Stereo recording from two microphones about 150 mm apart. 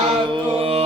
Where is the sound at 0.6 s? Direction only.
40° right (ahead or behind).